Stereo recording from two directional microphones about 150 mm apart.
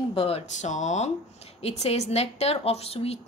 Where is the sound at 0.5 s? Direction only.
55° left (ahead or behind).